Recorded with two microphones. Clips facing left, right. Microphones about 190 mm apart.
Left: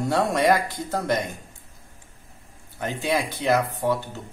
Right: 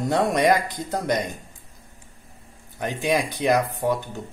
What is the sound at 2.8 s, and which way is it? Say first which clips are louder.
Speech: right 2 dB; 15° right (ahead or behind).